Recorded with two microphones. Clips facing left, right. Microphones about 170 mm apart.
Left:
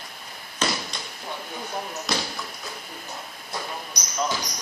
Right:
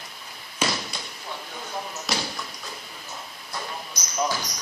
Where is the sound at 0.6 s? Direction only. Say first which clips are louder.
Even; 10° right (ahead or behind).